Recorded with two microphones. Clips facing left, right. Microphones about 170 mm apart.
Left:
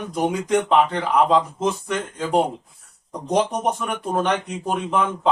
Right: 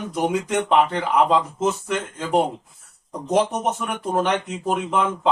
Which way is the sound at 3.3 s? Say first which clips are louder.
Even; 5° right (ahead or behind).